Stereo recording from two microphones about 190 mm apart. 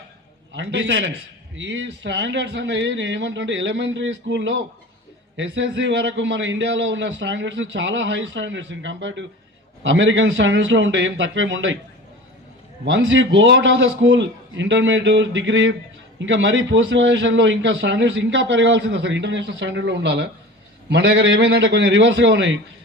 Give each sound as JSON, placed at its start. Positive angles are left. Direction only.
{"t": 0.5, "sound": "a man's voice", "side_deg": -70}
{"t": 12.8, "sound": "a man's voice", "side_deg": -75}